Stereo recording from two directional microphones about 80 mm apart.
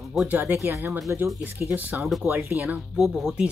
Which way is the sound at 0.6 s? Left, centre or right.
Right.